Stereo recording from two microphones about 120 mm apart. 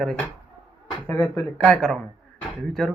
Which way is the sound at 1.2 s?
10° left (ahead or behind).